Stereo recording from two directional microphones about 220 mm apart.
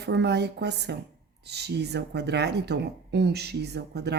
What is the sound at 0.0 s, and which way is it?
Speech, 50° right (ahead or behind).